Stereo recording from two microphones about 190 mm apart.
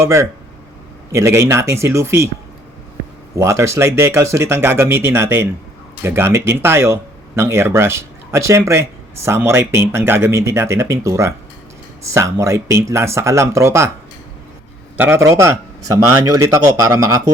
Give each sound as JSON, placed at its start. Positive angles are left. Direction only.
{"t": 0.0, "sound": "speech", "side_deg": -15}
{"t": 3.3, "sound": "speech", "side_deg": -15}
{"t": 14.9, "sound": "speech", "side_deg": -10}